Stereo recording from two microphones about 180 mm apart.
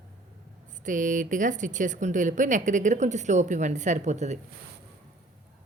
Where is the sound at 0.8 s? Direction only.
45° right (ahead or behind).